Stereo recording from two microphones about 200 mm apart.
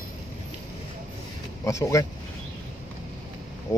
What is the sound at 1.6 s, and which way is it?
Speech, 15° left (ahead or behind).